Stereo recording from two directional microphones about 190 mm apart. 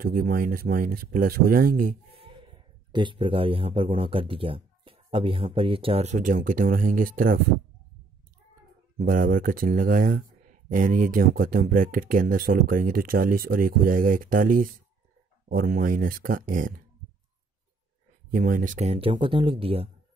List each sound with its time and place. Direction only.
0.0 s speech: 50° right (ahead or behind)
2.1 s speech: 25° right (ahead or behind); by 7.3 s 45° right (ahead or behind)
8.9 s speech: 45° right (ahead or behind)
18.3 s speech: 45° right (ahead or behind); by 19.9 s 30° right (ahead or behind)